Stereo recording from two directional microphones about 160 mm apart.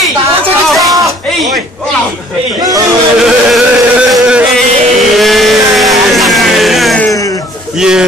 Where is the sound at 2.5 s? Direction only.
20° right (ahead or behind).